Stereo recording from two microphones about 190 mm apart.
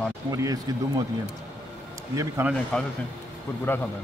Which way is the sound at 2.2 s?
15° right (ahead or behind).